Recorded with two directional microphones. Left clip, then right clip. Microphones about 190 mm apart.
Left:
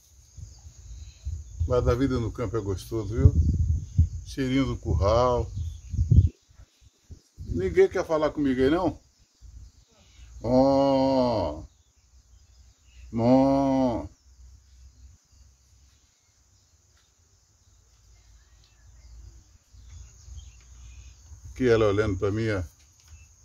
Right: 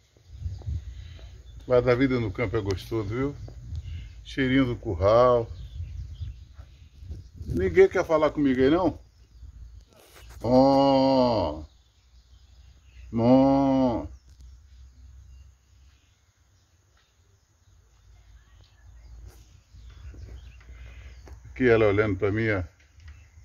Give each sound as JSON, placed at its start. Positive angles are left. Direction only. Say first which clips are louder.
{"t": 1.7, "sound": "a man's voice", "louder": "right 3 dB", "side_deg": 0}
{"t": 4.4, "sound": "a man's voice", "louder": "right 3 dB", "side_deg": 5}
{"t": 5.0, "sound": "speech", "louder": "right 4 dB", "side_deg": 15}
{"t": 7.5, "sound": "a man's voice", "louder": "right 2 dB", "side_deg": 0}
{"t": 10.4, "sound": "a man's voice", "louder": "right 2 dB", "side_deg": 0}
{"t": 13.1, "sound": "a sound", "louder": "right 1 dB", "side_deg": 5}
{"t": 21.5, "sound": "speech", "louder": "right 1 dB", "side_deg": 15}